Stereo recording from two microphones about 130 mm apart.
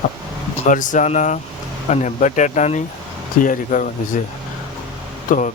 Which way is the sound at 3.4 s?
85° left.